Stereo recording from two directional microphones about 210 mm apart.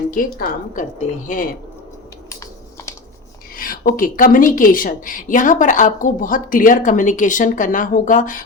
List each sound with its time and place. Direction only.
0.1 s speech: 40° left (ahead or behind)
3.5 s speech: 40° left (ahead or behind)